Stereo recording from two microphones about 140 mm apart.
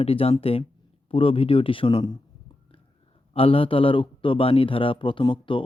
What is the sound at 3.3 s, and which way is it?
A man's voice, 40° left (ahead or behind).